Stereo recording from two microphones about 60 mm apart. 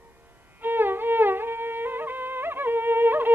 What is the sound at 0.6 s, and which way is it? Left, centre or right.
Music, right.